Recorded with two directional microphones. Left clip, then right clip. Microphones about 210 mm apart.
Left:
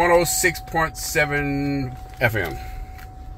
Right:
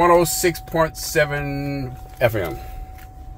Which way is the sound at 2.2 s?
25° right (ahead or behind).